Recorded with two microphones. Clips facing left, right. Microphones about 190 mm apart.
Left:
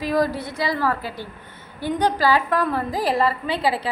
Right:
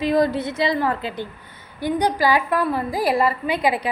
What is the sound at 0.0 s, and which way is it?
A woman's voice, 25° right (ahead or behind).